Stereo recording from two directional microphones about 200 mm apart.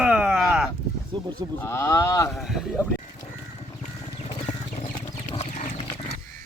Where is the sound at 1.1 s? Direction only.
20° right (ahead or behind).